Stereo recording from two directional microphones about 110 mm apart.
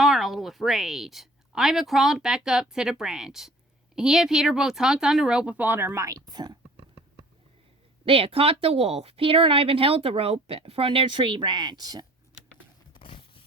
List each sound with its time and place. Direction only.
0.0 s a woman's voice: centre (ahead or behind); by 6.6 s 40° right (ahead or behind)
8.0 s speech: 55° right (ahead or behind); by 12.0 s 40° right (ahead or behind)
12.9 s a sound: 50° left (ahead or behind)